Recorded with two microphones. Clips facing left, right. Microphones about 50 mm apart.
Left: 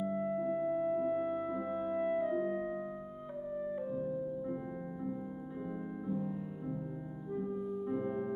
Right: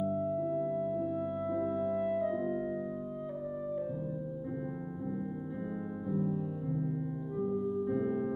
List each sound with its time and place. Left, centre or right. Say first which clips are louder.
0.6 s music: even; left; by 2.9 s centre
7.8 s music: right 4 dB; centre